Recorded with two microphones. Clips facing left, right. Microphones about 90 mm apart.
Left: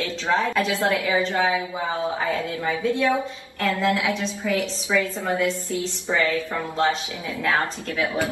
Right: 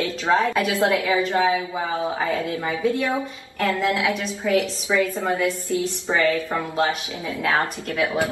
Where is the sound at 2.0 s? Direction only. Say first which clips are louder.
Even; 25° right (ahead or behind).